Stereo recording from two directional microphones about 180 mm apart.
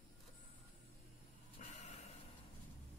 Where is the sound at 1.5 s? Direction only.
40° left (ahead or behind).